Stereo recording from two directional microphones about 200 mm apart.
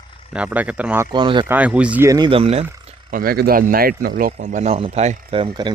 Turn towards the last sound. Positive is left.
turn(degrees=-25)  # may be behind; listen again after turning